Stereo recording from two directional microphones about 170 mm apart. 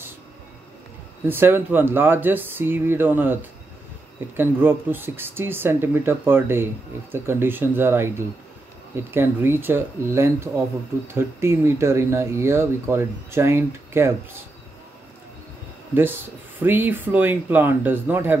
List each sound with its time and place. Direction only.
1.2 s speech: 15° right (ahead or behind)
4.4 s speech: 10° right (ahead or behind)
15.9 s speech: 10° right (ahead or behind)